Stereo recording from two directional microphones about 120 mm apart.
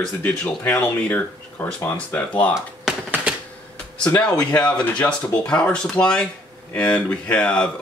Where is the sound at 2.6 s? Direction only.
10° right (ahead or behind).